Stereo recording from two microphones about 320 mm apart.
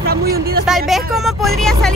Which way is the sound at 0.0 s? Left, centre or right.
Right.